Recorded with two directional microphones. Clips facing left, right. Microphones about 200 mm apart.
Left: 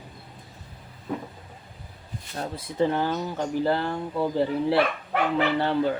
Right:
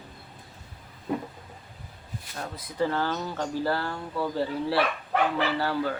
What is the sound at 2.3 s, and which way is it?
Speech, 30° left (ahead or behind).